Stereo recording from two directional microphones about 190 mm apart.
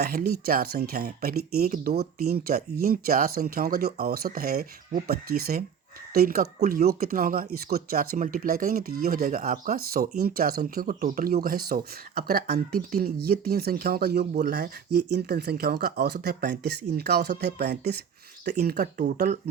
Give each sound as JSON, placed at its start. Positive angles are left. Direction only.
{"t": 0.0, "sound": "speech", "side_deg": -50}